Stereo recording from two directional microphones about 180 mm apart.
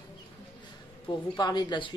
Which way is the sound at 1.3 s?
25° left (ahead or behind).